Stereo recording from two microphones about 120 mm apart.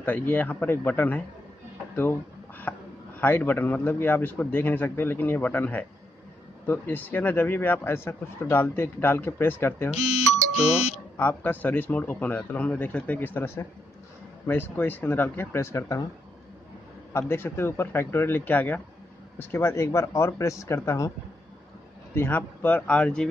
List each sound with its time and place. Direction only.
0.0 s speech: 15° left (ahead or behind)
2.7 s a sound: 20° left (ahead or behind)
3.2 s speech: 15° left (ahead or behind)
9.9 s music: 5° right (ahead or behind)
11.1 s speech: 15° left (ahead or behind)
17.1 s speech: 20° left (ahead or behind)
22.1 s speech: 20° left (ahead or behind)